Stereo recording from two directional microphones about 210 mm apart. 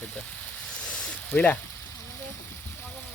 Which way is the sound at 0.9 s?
5° left (ahead or behind).